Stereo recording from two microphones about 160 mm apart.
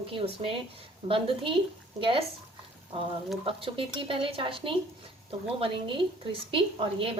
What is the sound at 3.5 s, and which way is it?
A woman's voice, 35° right (ahead or behind).